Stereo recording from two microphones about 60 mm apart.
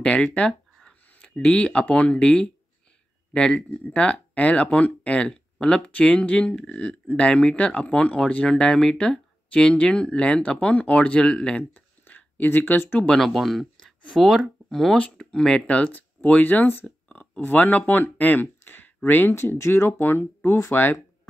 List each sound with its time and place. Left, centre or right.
0.0 s speech: centre
11.7 s a sound: left
12.4 s speech: left
13.2 s speech: centre
15.0 s speech: centre
15.6 s speech: left
19.3 s speech: left